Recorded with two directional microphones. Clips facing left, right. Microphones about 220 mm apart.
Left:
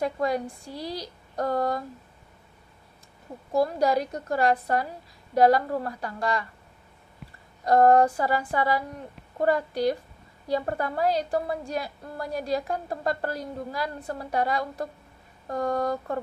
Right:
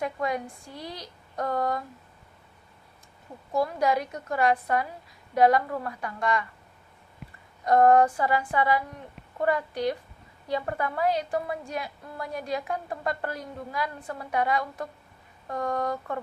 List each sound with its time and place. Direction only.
0.0 s a woman's voice: 35° left (ahead or behind)
3.5 s a woman's voice: 35° left (ahead or behind)
7.6 s a woman's voice: 35° left (ahead or behind)